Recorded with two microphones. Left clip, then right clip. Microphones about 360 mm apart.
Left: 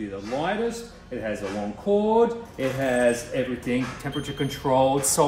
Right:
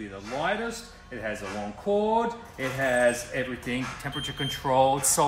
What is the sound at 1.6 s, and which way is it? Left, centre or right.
Speech, right.